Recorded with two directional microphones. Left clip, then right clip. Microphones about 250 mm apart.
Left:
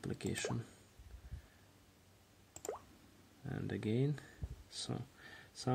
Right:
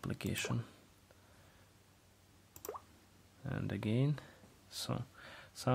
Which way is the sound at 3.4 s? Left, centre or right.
Centre.